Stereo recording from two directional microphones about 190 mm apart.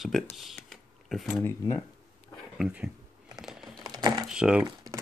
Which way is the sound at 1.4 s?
15° left (ahead or behind).